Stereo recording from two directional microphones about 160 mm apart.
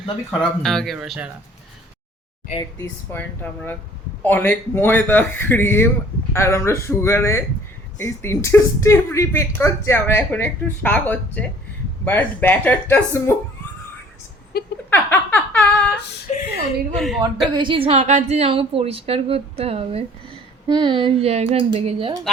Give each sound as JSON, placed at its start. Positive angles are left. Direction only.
{"t": 0.3, "sound": "speech", "side_deg": 5}
{"t": 2.6, "sound": "speech", "side_deg": 20}
{"t": 14.5, "sound": "a sound", "side_deg": 70}
{"t": 14.8, "sound": "a sound", "side_deg": 10}
{"t": 16.3, "sound": "a woman's voice", "side_deg": 45}
{"t": 16.9, "sound": "speech", "side_deg": 0}
{"t": 17.5, "sound": "speech", "side_deg": -30}